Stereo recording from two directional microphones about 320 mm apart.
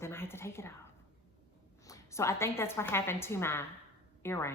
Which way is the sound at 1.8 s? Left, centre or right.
Centre.